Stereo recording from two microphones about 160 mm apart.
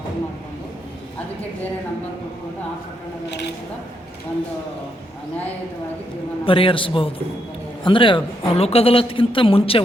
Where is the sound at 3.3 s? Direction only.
90° left.